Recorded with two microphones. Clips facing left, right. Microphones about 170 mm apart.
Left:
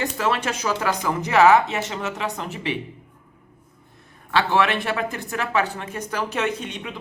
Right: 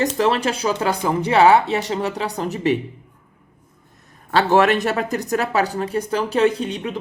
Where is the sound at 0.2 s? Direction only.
35° right (ahead or behind).